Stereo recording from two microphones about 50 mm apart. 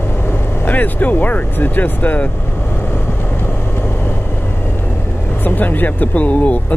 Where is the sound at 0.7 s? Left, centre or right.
Left.